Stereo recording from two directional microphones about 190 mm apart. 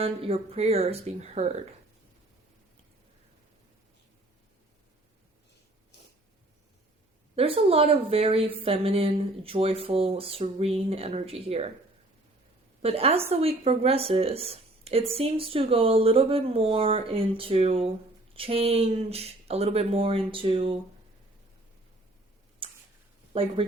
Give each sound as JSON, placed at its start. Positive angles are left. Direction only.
{"t": 0.0, "sound": "a woman's voice", "side_deg": -30}
{"t": 7.3, "sound": "a woman's voice", "side_deg": -30}
{"t": 12.8, "sound": "a woman's voice", "side_deg": -30}
{"t": 22.6, "sound": "tick-tock", "side_deg": -30}
{"t": 23.3, "sound": "speech", "side_deg": -30}